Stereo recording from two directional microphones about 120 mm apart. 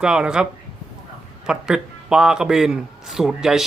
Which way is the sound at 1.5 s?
5° right (ahead or behind).